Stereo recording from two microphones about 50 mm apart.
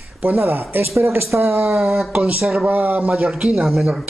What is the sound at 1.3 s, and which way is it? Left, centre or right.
Speech, right.